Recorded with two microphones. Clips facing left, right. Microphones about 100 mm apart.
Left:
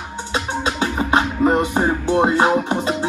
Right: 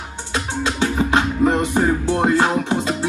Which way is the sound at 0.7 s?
30° left (ahead or behind).